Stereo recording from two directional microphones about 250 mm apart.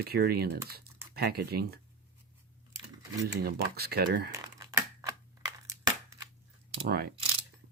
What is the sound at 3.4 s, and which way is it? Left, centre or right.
Speech, right.